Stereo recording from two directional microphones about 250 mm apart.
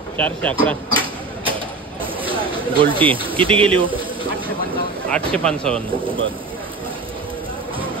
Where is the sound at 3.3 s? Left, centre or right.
Right.